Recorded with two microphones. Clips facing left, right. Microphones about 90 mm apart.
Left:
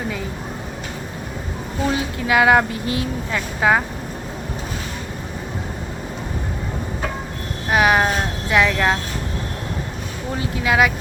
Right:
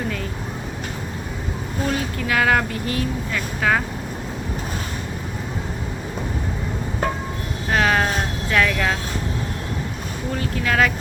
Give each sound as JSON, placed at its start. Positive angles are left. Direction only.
{"t": 1.9, "sound": "speech", "side_deg": 20}
{"t": 7.7, "sound": "speech", "side_deg": 15}
{"t": 10.3, "sound": "speech", "side_deg": 15}